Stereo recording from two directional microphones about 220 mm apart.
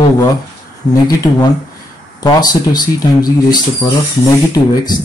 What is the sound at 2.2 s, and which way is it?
Speech, 20° left (ahead or behind).